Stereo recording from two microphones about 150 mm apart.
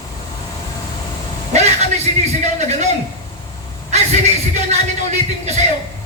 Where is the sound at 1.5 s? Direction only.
50° right (ahead or behind).